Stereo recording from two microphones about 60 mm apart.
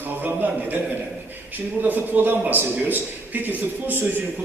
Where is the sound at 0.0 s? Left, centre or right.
Right.